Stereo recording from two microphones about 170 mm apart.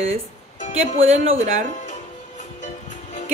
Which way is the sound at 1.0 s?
40° right (ahead or behind).